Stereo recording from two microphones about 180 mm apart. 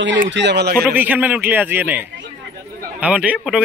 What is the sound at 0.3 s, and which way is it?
Speech, 75° right (ahead or behind).